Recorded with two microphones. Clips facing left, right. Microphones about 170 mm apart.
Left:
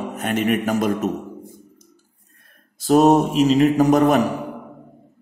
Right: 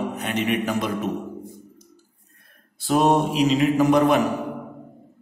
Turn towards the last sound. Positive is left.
turn(degrees=40)  # may be behind; listen again after turning